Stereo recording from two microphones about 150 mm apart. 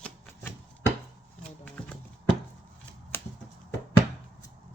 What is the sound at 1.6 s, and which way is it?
Horse, 10° left (ahead or behind).